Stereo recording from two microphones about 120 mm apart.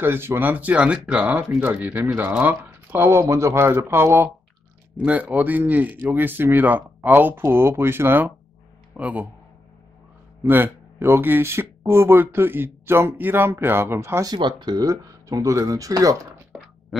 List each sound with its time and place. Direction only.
0.0 s speech: 20° right (ahead or behind)
10.4 s speech: 15° right (ahead or behind)
14.3 s speech: 35° right (ahead or behind)
16.9 s a sound: centre (ahead or behind)